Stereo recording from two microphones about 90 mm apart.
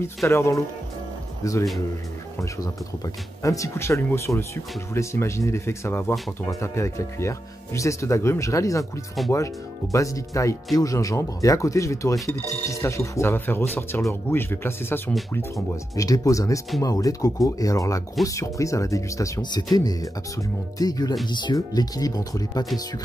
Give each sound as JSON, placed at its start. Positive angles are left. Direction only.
{"t": 0.0, "sound": "speech", "side_deg": 30}
{"t": 3.4, "sound": "speech", "side_deg": 35}
{"t": 9.9, "sound": "speech", "side_deg": 35}
{"t": 15.3, "sound": "speech", "side_deg": 35}
{"t": 21.3, "sound": "speech", "side_deg": 55}
{"t": 21.5, "sound": "speech", "side_deg": 45}